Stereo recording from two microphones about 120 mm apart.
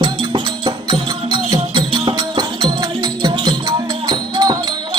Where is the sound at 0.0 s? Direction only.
45° right (ahead or behind).